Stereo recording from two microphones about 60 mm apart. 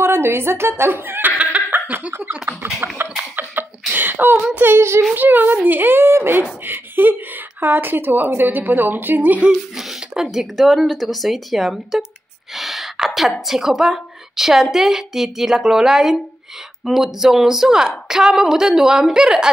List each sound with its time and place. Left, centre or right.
0.0 s snicker: right
2.1 s scratching: right
3.3 s a sound: right
4.6 s scratching: right
5.1 s speech: right
9.8 s a sound: centre
10.3 s speech: centre